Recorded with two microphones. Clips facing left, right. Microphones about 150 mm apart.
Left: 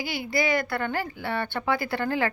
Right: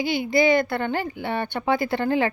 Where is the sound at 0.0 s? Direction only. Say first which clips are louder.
Right 7 dB; 20° right (ahead or behind).